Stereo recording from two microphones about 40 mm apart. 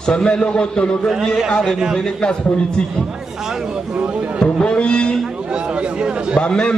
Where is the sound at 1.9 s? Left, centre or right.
Left.